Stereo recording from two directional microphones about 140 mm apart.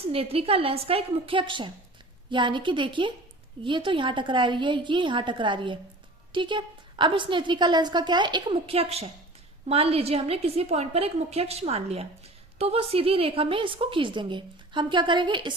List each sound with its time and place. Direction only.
0.1 s a woman's voice: 45° right (ahead or behind)